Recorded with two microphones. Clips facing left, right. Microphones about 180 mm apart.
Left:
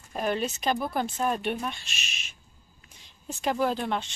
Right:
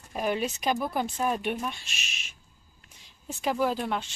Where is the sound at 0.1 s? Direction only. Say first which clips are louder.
Even; 10° right (ahead or behind).